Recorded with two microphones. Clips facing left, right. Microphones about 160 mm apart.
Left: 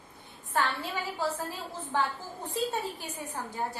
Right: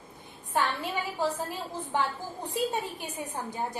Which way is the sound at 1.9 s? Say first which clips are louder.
Right 1 dB; 20° right (ahead or behind).